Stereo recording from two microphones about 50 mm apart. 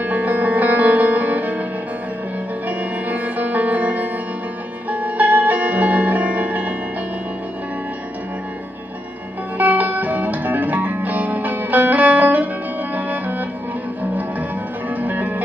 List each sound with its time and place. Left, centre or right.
0.0 s music: right
2.8 s music: right
9.6 s music: right
15.0 s music: right